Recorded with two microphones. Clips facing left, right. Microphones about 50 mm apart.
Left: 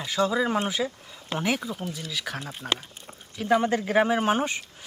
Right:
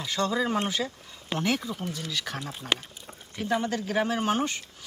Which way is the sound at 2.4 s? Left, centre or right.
Left.